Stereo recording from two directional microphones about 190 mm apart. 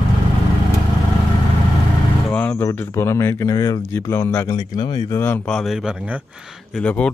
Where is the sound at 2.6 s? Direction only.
15° left (ahead or behind).